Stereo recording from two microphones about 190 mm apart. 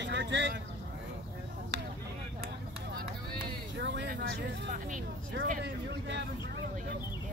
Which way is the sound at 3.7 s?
65° right (ahead or behind).